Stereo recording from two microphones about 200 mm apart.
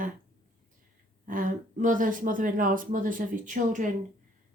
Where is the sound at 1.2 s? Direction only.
40° right (ahead or behind).